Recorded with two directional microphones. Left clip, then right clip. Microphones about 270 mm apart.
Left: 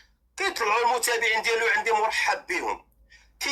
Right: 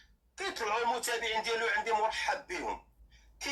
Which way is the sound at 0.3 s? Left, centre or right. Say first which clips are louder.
Left 9 dB; left.